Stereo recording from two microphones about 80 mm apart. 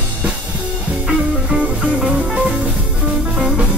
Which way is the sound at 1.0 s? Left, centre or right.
Centre.